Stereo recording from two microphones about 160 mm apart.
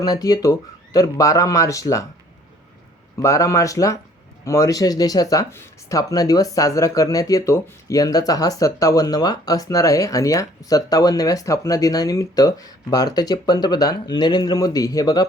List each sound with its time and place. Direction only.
0.0 s speech: 25° left (ahead or behind)
3.2 s speech: 20° left (ahead or behind)